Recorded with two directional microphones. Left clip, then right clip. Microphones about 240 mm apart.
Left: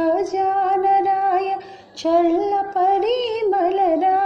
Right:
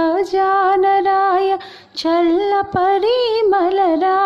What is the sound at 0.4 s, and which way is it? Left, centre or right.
Music, right.